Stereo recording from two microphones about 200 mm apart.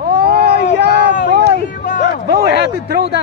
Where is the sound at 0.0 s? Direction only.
50° right (ahead or behind).